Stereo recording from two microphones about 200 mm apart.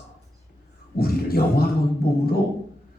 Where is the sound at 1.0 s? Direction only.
50° left (ahead or behind).